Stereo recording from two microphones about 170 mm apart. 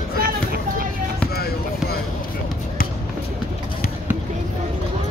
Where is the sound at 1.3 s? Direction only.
65° left (ahead or behind).